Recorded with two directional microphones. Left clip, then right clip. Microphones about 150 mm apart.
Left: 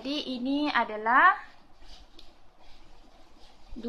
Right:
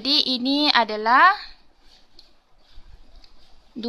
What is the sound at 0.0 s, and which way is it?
Speech, 75° right (ahead or behind).